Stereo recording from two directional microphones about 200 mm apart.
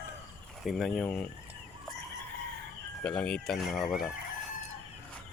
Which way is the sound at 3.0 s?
5° left (ahead or behind).